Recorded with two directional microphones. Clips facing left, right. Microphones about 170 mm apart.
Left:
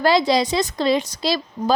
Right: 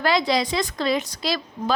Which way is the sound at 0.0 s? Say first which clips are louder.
Left 4 dB; 35° left (ahead or behind).